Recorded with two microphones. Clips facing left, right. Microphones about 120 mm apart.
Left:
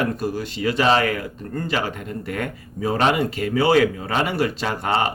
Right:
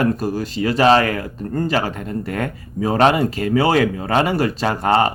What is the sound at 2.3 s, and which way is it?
Speech, 40° right (ahead or behind).